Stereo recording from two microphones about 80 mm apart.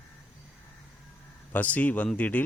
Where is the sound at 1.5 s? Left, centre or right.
Centre.